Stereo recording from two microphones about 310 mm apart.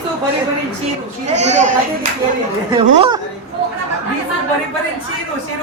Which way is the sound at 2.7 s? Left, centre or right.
Centre.